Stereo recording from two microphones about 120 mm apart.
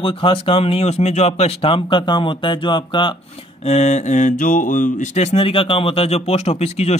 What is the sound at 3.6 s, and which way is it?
Mantra, 70° left (ahead or behind).